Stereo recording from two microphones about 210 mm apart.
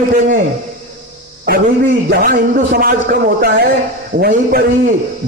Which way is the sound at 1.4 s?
50° right (ahead or behind).